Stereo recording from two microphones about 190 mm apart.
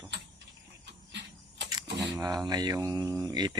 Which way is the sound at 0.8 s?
65° right (ahead or behind).